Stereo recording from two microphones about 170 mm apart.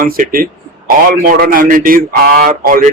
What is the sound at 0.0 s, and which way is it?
Speech, 55° right (ahead or behind).